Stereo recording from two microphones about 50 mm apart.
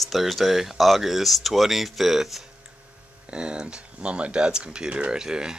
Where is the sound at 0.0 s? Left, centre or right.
Centre.